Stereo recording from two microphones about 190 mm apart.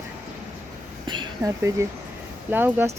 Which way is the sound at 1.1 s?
20° right (ahead or behind).